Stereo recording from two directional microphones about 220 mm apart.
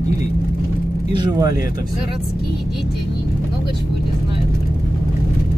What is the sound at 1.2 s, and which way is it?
Speech, 20° right (ahead or behind).